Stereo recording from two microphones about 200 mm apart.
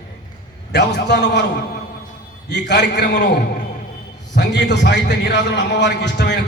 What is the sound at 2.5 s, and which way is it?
Speech, 60° left (ahead or behind).